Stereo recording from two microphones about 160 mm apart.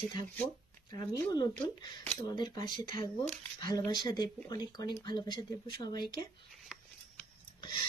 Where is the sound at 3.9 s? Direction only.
25° left (ahead or behind).